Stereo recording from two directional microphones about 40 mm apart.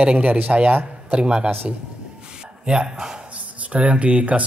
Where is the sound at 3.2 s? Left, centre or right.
Right.